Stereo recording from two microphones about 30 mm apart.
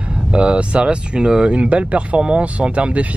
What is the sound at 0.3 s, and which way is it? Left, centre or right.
Speech, right.